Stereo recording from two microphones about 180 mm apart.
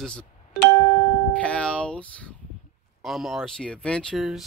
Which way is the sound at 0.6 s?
25° left (ahead or behind).